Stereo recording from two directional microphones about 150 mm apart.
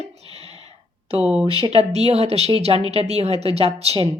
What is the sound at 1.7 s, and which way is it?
A woman's voice, 45° right (ahead or behind).